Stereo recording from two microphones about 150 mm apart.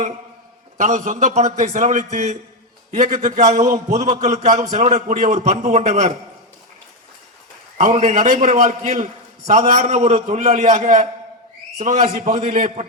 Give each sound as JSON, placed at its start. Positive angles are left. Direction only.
{"t": 0.8, "sound": "a man's voice", "side_deg": -55}
{"t": 8.0, "sound": "a man's voice", "side_deg": -60}
{"t": 12.1, "sound": "a man's voice", "side_deg": -60}